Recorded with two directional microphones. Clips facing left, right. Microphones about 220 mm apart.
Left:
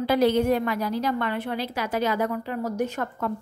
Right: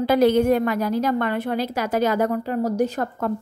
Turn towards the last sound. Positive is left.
turn(degrees=-35)  # may be behind; listen again after turning